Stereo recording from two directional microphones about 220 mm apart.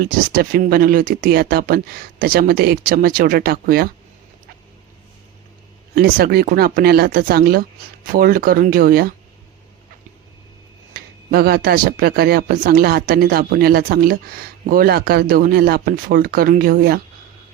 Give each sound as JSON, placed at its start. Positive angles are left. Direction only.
{"t": 0.0, "sound": "speech", "side_deg": -40}
{"t": 5.9, "sound": "speech", "side_deg": -45}
{"t": 10.9, "sound": "speech", "side_deg": -45}